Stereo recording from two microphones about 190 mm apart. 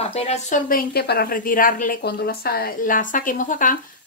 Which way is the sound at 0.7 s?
55° left (ahead or behind).